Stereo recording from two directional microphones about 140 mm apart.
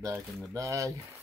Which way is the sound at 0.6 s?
25° right (ahead or behind).